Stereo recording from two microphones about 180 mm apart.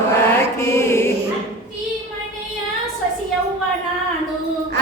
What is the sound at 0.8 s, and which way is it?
Choir, 15° left (ahead or behind).